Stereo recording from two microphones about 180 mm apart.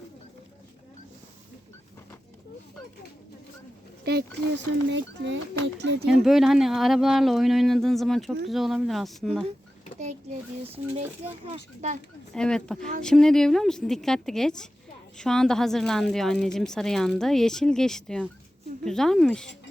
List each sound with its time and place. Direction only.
4.0 s speech: 65° right (ahead or behind); by 5.4 s 85° right
5.6 s speech: 70° right (ahead or behind)
6.1 s a woman's voice: centre (ahead or behind)
11.4 s speech: 35° right (ahead or behind)
12.3 s a woman's voice: 5° left (ahead or behind)